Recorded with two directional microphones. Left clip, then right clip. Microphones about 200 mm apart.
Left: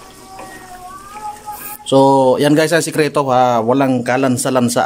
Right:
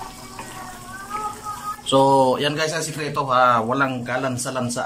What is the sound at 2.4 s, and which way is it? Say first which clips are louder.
A man's voice: left 10 dB; 40° left (ahead or behind).